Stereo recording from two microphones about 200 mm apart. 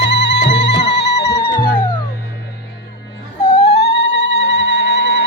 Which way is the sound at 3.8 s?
65° left (ahead or behind).